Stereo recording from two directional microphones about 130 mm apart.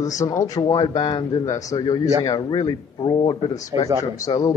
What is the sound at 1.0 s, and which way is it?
Speech, 40° left (ahead or behind).